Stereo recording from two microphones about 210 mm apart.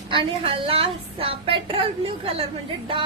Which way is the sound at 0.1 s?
25° right (ahead or behind).